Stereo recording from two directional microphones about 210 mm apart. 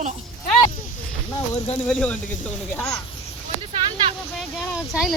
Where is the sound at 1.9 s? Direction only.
5° left (ahead or behind).